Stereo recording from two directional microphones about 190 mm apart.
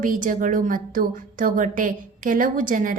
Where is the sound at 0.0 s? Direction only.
45° right (ahead or behind).